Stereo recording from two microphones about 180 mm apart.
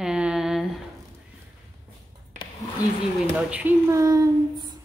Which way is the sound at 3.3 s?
10° right (ahead or behind).